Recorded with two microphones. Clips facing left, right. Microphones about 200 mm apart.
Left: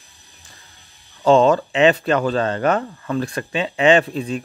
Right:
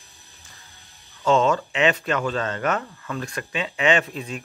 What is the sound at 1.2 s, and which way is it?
Speech, 35° left (ahead or behind).